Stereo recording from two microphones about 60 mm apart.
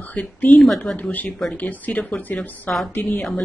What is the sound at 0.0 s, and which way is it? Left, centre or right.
A woman's voice, left.